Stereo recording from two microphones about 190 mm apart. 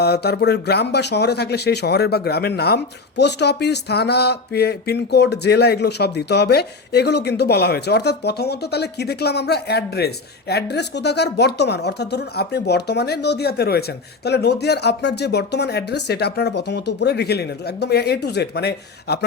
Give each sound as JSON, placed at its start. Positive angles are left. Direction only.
{"t": 0.0, "sound": "speech", "side_deg": 60}